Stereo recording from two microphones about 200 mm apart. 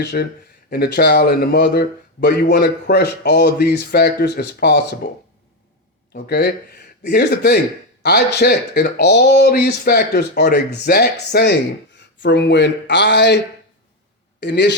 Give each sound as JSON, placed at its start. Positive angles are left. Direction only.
{"t": 0.0, "sound": "speech", "side_deg": 55}
{"t": 6.1, "sound": "speech", "side_deg": 55}
{"t": 14.4, "sound": "speech", "side_deg": 60}